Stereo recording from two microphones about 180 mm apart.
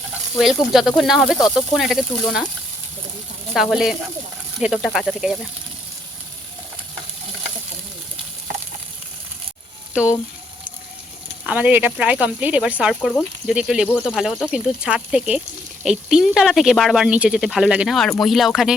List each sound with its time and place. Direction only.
0.3 s speech: centre (ahead or behind)
3.5 s speech: centre (ahead or behind)
11.4 s speech: 10° right (ahead or behind)